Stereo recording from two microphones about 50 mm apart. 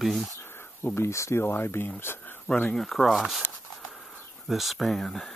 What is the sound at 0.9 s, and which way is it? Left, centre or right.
Speech, left.